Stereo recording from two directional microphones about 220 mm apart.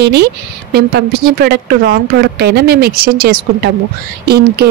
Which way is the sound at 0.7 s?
45° right (ahead or behind).